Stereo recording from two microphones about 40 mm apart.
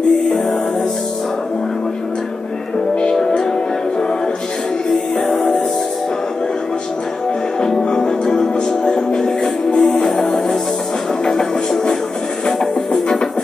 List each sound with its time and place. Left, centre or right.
3.0 s music: centre
5.3 s music: centre
7.6 s music: centre